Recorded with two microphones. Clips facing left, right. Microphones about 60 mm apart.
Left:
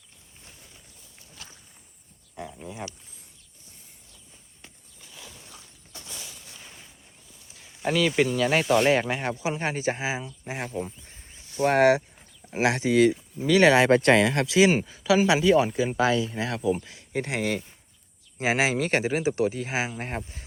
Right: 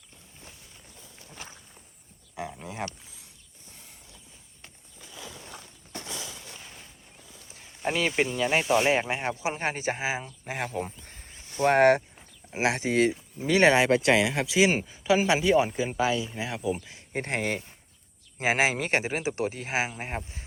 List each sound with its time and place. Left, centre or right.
2.3 s a sound: right
5.5 s shatter: right
6.6 s a sound: centre
7.9 s speech: right
8.4 s speech: centre
8.9 s speech: centre; by 12.0 s right
12.5 s speech: right
13.7 s speech: centre
16.8 s speech: right
17.2 s speech: right
19.9 s speech: centre